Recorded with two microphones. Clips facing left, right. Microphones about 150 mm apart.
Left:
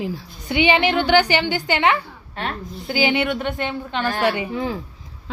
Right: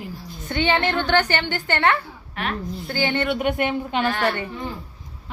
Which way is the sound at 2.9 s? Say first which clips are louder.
Left 4 dB; 90° left.